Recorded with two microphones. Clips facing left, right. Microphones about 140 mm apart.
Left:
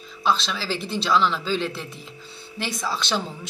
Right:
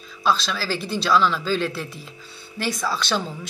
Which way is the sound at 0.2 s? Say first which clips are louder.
Right 1 dB; 20° left (ahead or behind).